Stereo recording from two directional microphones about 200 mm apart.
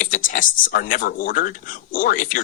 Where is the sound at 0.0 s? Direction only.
40° left (ahead or behind).